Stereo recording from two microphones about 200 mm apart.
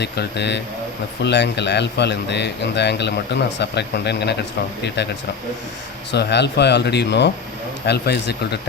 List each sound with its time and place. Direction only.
0.0 s a man's voice: 55° left (ahead or behind)